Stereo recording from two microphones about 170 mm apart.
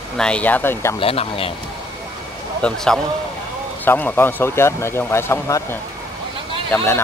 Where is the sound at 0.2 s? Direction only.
5° left (ahead or behind).